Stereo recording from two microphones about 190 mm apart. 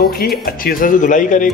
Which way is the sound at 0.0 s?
55° left (ahead or behind).